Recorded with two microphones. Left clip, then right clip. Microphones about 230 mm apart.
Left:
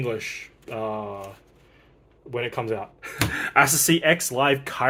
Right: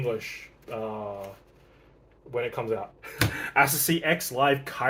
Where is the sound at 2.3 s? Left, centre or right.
Left.